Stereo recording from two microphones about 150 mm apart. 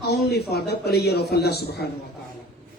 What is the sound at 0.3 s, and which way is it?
A woman's voice, 90° left.